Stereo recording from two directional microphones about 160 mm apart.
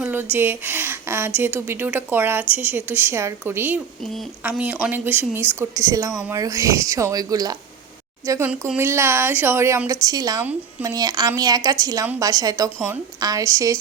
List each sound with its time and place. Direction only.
0.0 s a woman's voice: 10° right (ahead or behind)
8.3 s a woman's voice: 10° right (ahead or behind)